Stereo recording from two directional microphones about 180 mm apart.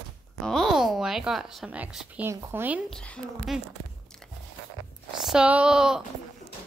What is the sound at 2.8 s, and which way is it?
Speech, 5° left (ahead or behind).